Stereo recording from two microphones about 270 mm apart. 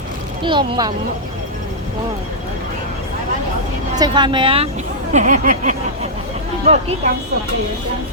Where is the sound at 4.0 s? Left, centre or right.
Centre.